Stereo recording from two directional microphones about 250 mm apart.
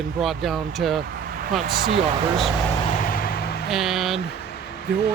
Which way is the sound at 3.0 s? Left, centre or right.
Left.